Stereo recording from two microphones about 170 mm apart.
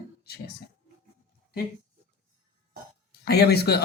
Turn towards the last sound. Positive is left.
turn(degrees=70)  # may be behind; listen again after turning